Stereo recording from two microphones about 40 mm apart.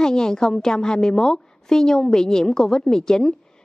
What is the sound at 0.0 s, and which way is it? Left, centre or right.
A woman's voice, centre.